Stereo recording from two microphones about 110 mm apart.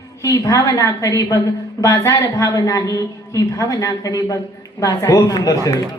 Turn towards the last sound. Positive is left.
turn(degrees=30)  # may be behind; listen again after turning